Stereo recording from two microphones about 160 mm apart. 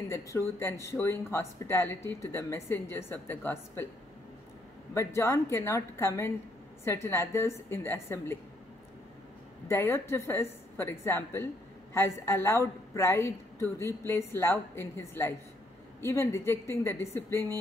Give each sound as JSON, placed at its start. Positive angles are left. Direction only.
{"t": 0.1, "sound": "speech", "side_deg": 15}
{"t": 4.9, "sound": "speech", "side_deg": 20}
{"t": 9.7, "sound": "speech", "side_deg": 15}